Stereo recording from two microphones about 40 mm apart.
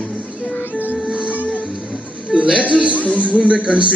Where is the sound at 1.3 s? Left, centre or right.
Left.